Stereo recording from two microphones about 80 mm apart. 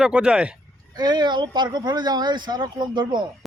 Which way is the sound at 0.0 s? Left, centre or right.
Centre.